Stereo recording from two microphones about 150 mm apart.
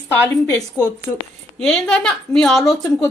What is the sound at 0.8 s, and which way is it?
Speech, 10° right (ahead or behind).